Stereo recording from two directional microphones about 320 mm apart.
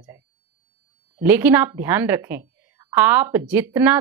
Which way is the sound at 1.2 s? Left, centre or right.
Centre.